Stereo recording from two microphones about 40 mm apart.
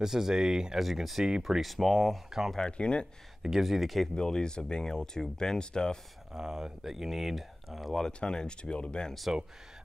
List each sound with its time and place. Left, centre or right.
0.0 s speech: centre
0.7 s speech: centre
2.2 s speech: centre
2.6 s speech: left
3.4 s speech: centre
4.1 s speech: centre
6.3 s speech: centre
8.2 s speech: left